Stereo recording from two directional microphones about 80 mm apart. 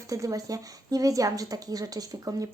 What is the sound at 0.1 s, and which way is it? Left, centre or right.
Speech, right.